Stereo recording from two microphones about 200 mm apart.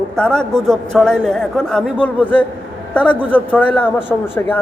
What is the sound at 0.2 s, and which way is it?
A man's voice, 5° left (ahead or behind).